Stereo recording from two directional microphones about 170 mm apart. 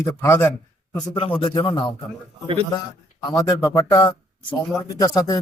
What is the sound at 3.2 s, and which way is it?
Speech, 20° left (ahead or behind).